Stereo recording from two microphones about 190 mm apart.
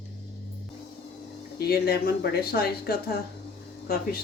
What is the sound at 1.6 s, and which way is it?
Speech, 55° left (ahead or behind).